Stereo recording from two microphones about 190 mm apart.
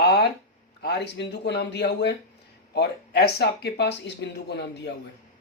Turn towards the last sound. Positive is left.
turn(degrees=65)  # may be behind; listen again after turning